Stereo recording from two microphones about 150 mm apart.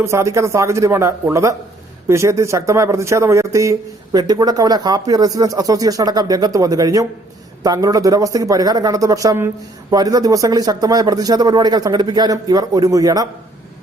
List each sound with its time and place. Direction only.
0.0 s a man's voice: 20° right (ahead or behind)